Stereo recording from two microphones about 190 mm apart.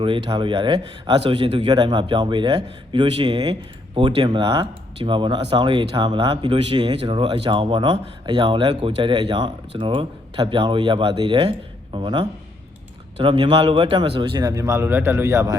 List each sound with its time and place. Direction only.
0.0 s speech: 25° right (ahead or behind)